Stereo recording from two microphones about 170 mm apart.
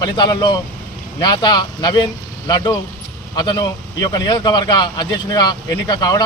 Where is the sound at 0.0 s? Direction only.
25° left (ahead or behind).